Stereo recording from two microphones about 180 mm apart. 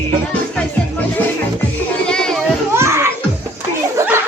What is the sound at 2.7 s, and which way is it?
Children playing, 15° right (ahead or behind).